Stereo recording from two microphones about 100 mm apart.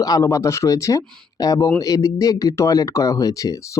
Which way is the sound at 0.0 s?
35° left (ahead or behind).